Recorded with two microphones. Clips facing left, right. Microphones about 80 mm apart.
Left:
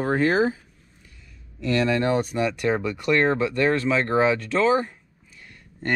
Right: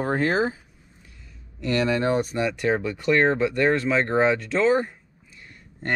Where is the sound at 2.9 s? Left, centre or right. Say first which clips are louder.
Right 1 dB; centre.